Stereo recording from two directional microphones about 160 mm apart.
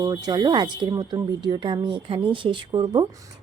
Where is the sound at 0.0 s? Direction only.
25° right (ahead or behind).